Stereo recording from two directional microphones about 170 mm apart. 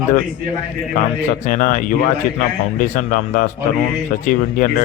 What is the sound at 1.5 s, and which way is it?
Speech, 50° left (ahead or behind).